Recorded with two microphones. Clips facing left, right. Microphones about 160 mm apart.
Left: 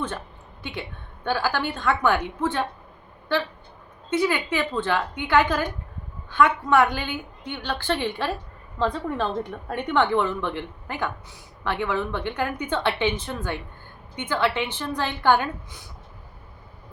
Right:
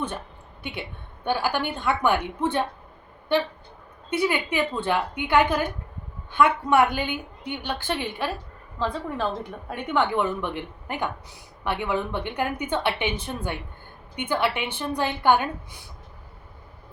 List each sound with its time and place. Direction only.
0.6 s a woman's voice: 15° right (ahead or behind)
4.3 s a woman's voice: 15° right (ahead or behind)
8.8 s a woman's voice: 5° right (ahead or behind)